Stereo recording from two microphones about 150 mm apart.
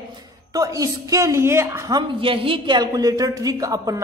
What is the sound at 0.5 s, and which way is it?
A woman's voice, 25° right (ahead or behind).